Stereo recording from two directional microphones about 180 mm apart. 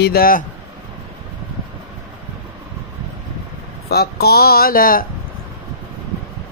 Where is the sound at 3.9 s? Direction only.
60° left (ahead or behind).